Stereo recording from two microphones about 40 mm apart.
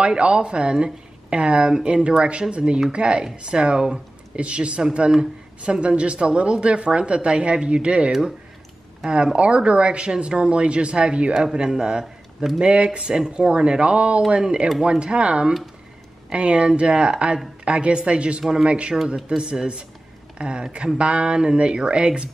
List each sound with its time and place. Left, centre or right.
0.0 s a woman's voice: right
9.1 s a woman's voice: right
11.5 s a woman's voice: centre
18.4 s speech: centre
18.7 s a woman's voice: right